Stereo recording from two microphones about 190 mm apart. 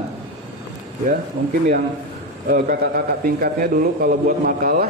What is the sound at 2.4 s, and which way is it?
A man's voice, 50° right (ahead or behind).